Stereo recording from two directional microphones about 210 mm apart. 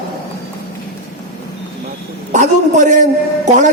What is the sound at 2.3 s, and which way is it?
A man's voice, 35° right (ahead or behind).